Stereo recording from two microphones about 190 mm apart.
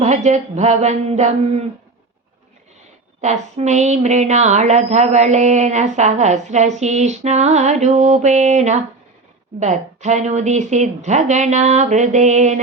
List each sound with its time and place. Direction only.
0.0 s speech: 35° right (ahead or behind)
3.2 s speech: 40° right (ahead or behind)